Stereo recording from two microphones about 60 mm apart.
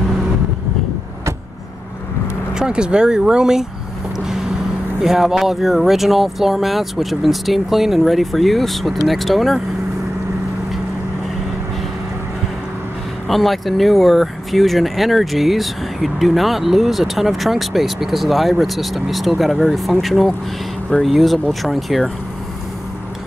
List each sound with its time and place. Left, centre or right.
2.5 s speech: centre
5.0 s speech: centre
13.3 s speech: centre